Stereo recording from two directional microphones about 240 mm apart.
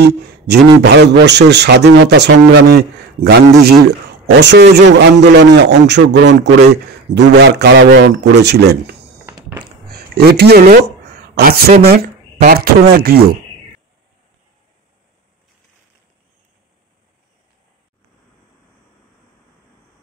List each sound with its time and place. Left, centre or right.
0.0 s a man's voice: right
9.2 s a sound: centre
9.8 s speech: right